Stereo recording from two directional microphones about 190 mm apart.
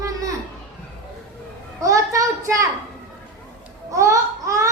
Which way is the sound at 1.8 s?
15° right (ahead or behind).